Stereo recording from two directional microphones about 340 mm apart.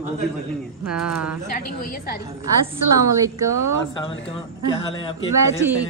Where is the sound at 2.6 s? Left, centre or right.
Centre.